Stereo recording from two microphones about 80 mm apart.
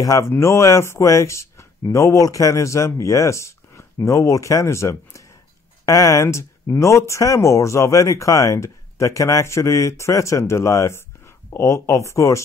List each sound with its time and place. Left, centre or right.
0.0 s speech: left
0.3 s speech: left